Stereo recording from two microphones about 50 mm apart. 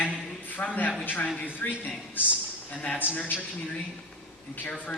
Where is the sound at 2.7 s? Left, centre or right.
Left.